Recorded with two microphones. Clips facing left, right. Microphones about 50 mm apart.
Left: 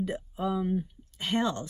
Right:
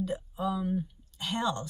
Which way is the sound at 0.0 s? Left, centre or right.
Left.